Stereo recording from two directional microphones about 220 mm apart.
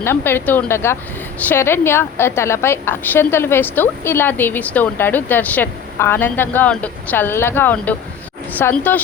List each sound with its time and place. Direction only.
0.0 s a woman's voice: 10° left (ahead or behind)